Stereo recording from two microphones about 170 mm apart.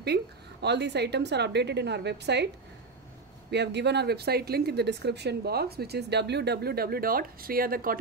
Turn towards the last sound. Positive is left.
turn(degrees=-60)  # may be behind; listen again after turning